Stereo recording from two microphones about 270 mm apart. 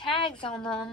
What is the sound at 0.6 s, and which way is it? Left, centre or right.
Speech, centre.